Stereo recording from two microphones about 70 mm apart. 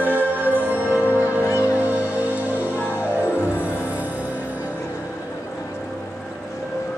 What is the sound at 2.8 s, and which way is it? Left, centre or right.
Music, left.